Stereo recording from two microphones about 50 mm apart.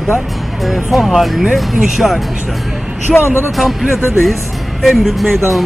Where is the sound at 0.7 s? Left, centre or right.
Centre.